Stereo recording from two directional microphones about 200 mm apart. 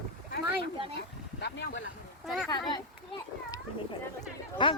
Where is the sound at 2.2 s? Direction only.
Centre (ahead or behind).